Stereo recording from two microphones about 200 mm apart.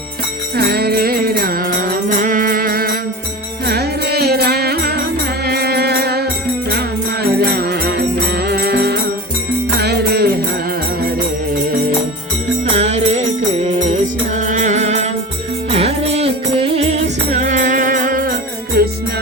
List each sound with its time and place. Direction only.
0.5 s music: 50° right (ahead or behind)
12.7 s music: 35° right (ahead or behind); by 18.9 s 50° right (ahead or behind)